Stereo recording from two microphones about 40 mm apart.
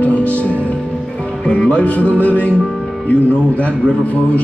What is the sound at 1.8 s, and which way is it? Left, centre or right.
Music, left.